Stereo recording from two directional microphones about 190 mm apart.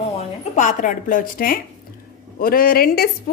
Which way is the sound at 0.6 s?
40° left (ahead or behind).